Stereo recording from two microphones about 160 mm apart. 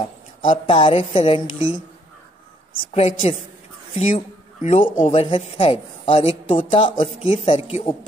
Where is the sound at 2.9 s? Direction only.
40° left (ahead or behind).